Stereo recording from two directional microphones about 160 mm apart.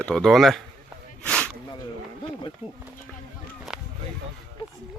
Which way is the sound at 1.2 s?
10° left (ahead or behind).